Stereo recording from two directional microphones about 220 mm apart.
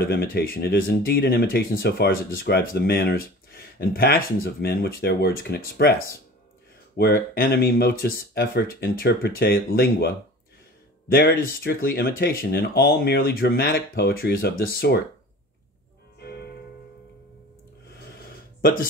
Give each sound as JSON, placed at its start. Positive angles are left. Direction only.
{"t": 0.0, "sound": "speech", "side_deg": 45}
{"t": 16.2, "sound": "music", "side_deg": 45}
{"t": 18.6, "sound": "speech", "side_deg": 40}